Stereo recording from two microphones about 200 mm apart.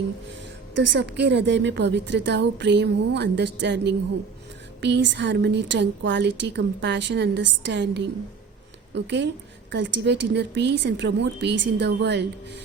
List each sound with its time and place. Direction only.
0.8 s a woman's voice: 60° right (ahead or behind)